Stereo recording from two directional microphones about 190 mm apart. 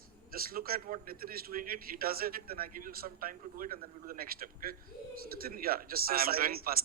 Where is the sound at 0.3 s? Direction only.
50° right (ahead or behind).